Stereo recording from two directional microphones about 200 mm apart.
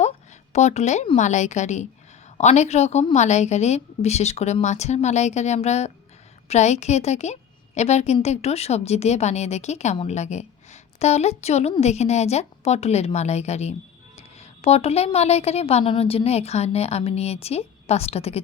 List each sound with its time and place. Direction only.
0.5 s a woman's voice: 35° left (ahead or behind)